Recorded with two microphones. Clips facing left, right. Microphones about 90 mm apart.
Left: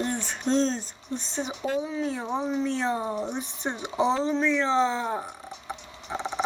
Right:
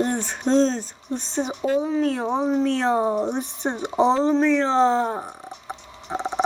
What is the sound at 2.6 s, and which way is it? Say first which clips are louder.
Speech: right 6 dB; 85° right.